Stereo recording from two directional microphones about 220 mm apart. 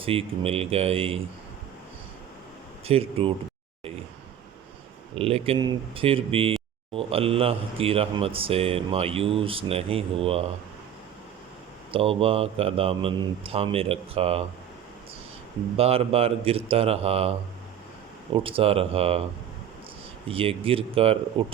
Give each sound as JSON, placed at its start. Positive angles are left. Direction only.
{"t": 0.0, "sound": "speech", "side_deg": -25}
{"t": 2.8, "sound": "speech", "side_deg": -25}
{"t": 5.1, "sound": "speech", "side_deg": -25}
{"t": 11.9, "sound": "speech", "side_deg": -25}
{"t": 15.8, "sound": "speech", "side_deg": -25}
{"t": 18.4, "sound": "speech", "side_deg": -25}
{"t": 20.2, "sound": "speech", "side_deg": -25}